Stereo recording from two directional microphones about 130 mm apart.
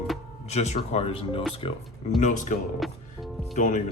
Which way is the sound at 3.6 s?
70° left (ahead or behind).